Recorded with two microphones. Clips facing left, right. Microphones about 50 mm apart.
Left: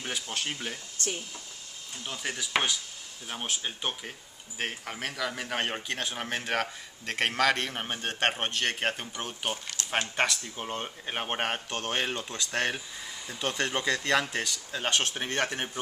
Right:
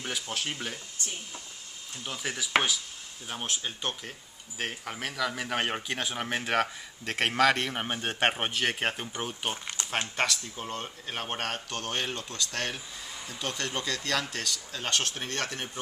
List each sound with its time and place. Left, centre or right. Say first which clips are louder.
0.0 s speech: even; centre
2.0 s speech: even; centre
9.8 s speech: left 2 dB; centre
10.5 s speech: left 1 dB; left